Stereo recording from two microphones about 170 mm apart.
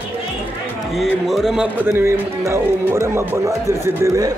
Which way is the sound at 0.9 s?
Centre (ahead or behind).